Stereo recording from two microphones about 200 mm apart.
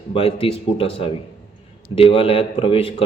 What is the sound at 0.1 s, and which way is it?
A man's voice, 30° left (ahead or behind).